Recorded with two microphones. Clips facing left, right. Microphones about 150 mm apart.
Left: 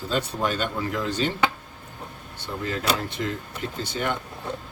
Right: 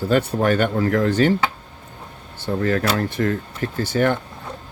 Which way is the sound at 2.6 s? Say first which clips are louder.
Right 6 dB; 65° right (ahead or behind).